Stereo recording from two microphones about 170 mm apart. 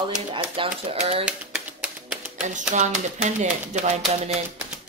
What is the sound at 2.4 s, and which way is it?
Speech, 45° right (ahead or behind).